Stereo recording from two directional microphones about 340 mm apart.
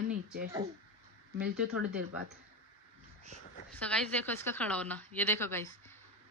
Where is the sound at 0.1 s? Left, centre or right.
Right.